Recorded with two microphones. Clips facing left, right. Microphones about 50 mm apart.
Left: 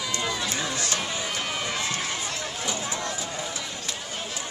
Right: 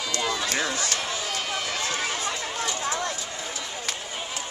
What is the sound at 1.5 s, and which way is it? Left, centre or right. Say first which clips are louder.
Run: even; centre.